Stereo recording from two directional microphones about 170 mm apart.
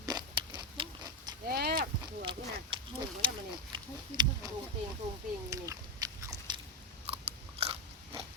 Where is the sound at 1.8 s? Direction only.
25° right (ahead or behind).